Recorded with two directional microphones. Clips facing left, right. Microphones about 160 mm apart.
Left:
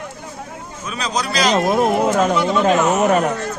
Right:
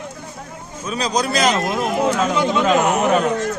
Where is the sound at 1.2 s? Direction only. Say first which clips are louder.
Right 1 dB; 50° right (ahead or behind).